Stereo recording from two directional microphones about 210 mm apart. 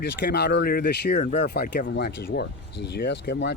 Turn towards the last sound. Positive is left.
turn(degrees=55)  # may be behind; listen again after turning